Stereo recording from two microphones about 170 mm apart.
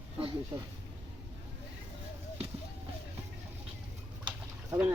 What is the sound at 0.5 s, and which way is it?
Speech, 15° right (ahead or behind).